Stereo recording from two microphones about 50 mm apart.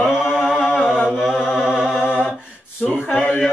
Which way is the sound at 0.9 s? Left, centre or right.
Centre.